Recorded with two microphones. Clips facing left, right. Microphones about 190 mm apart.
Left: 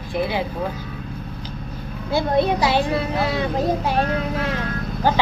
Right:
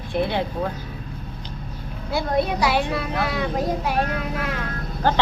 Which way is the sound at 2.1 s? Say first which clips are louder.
Left 3 dB; 25° left (ahead or behind).